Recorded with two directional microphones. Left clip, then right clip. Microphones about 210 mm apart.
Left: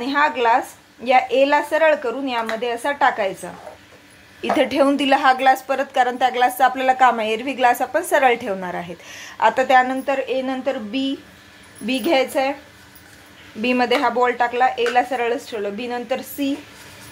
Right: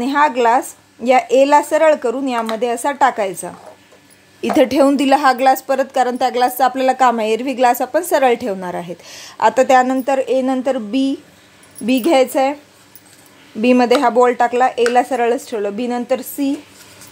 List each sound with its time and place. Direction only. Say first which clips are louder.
0.0 s a woman's voice: right 4 dB; 55° right (ahead or behind)
13.6 s a woman's voice: right 5 dB; 55° right (ahead or behind)